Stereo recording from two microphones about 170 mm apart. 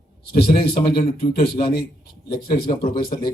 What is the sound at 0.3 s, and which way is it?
A man's voice, 65° left (ahead or behind).